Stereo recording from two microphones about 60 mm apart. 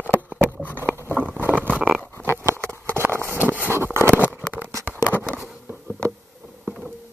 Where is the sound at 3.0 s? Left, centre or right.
Right.